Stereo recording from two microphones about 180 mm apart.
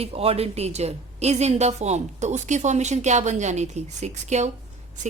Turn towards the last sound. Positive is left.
turn(degrees=-40)  # may be behind; listen again after turning